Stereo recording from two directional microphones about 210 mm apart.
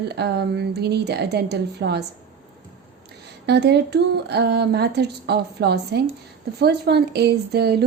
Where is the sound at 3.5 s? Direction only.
50° right (ahead or behind).